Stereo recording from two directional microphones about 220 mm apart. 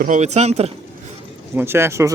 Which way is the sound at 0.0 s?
35° right (ahead or behind).